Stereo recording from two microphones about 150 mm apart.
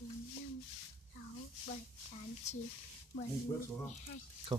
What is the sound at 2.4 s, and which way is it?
Speech, 50° left (ahead or behind).